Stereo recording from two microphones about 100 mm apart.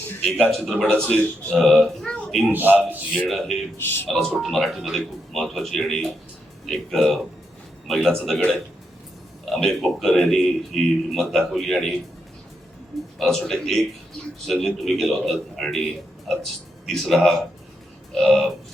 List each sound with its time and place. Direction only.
0.2 s a man's voice: 10° left (ahead or behind)
2.5 s a man's voice: 20° right (ahead or behind)
3.2 s a man's voice: centre (ahead or behind)
3.8 s speech: 20° left (ahead or behind)
4.1 s a man's voice: 10° left (ahead or behind)
13.1 s a man's voice: 5° left (ahead or behind)